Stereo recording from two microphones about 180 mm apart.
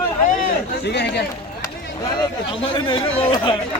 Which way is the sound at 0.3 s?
50° left (ahead or behind).